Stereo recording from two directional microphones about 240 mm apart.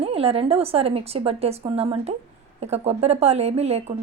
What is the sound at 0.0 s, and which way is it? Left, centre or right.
A woman's voice, right.